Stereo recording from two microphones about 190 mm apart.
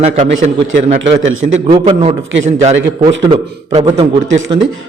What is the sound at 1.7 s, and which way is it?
A man's voice, 25° right (ahead or behind).